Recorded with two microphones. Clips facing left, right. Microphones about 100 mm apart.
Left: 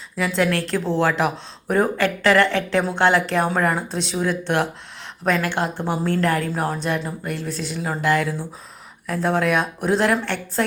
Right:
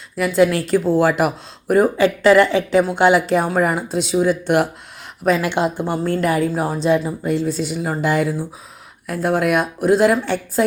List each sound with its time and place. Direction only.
0.2 s speech: 5° right (ahead or behind)
5.8 s speech: centre (ahead or behind)